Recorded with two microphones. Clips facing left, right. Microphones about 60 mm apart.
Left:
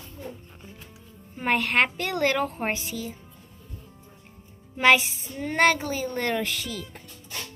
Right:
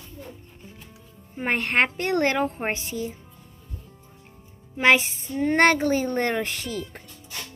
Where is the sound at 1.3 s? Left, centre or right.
Right.